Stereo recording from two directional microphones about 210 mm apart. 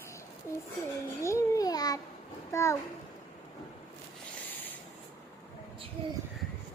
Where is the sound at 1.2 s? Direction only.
15° left (ahead or behind).